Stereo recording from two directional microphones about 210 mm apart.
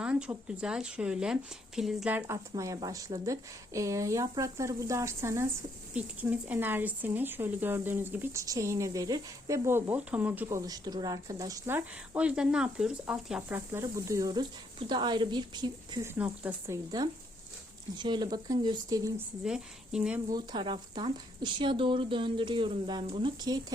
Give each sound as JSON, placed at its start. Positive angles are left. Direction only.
{"t": 0.0, "sound": "speech", "side_deg": -5}
{"t": 19.5, "sound": "speech", "side_deg": -5}
{"t": 20.3, "sound": "speech", "side_deg": -20}